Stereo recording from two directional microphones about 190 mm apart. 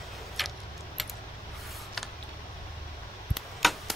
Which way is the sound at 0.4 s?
Centre (ahead or behind).